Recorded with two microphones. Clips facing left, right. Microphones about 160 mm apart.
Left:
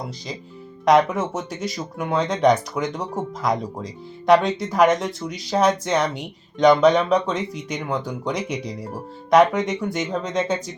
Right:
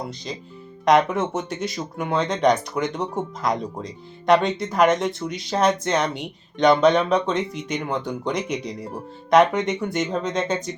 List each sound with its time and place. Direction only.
0.9 s speech: 5° left (ahead or behind)